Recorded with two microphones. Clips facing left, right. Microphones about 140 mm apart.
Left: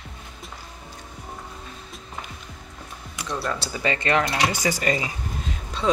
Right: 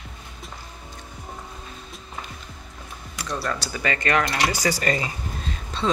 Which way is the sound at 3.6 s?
25° left (ahead or behind).